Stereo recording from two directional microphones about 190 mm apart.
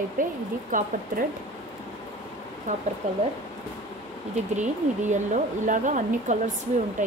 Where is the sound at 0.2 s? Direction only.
45° right (ahead or behind).